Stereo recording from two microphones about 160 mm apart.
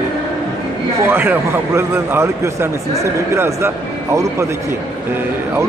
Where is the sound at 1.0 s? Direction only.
15° right (ahead or behind).